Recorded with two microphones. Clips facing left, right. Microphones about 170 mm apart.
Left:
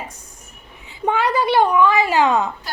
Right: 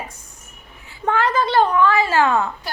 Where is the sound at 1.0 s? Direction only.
15° left (ahead or behind).